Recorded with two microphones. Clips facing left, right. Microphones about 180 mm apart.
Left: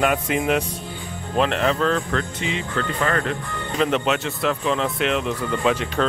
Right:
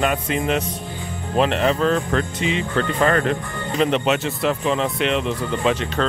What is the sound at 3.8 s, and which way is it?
A man's voice, centre (ahead or behind).